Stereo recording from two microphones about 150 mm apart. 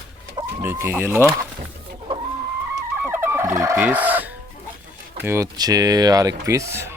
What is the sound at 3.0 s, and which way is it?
Chicken, 15° right (ahead or behind).